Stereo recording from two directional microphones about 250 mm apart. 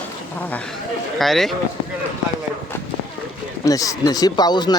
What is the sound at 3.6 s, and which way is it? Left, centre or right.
Speech, centre.